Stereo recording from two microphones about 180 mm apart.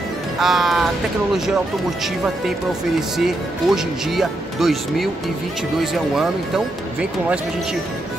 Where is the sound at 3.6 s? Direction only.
5° right (ahead or behind).